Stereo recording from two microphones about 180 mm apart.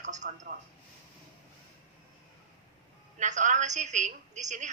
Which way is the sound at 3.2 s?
40° right (ahead or behind).